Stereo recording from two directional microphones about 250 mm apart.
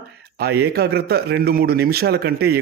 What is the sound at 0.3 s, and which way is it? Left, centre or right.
Speech, right.